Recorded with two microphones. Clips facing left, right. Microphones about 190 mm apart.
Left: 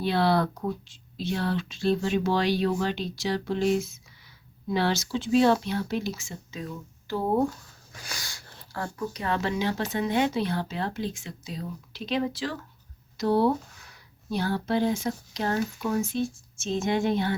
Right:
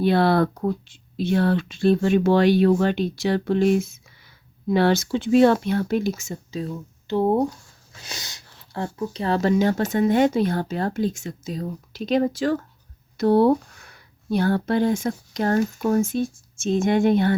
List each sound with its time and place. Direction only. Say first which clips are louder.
0.0 s speech: right 5 dB; 50° right (ahead or behind)